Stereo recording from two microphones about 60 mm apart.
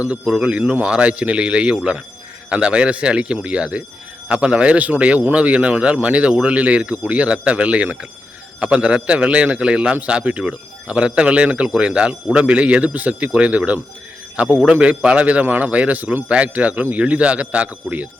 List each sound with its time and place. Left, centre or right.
0.3 s a man's voice: centre